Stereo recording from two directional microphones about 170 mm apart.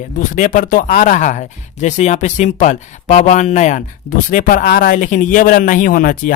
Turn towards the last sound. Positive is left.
turn(degrees=55)  # may be behind; listen again after turning